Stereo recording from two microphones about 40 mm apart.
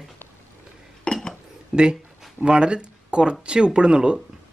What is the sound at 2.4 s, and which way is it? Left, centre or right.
Speech, right.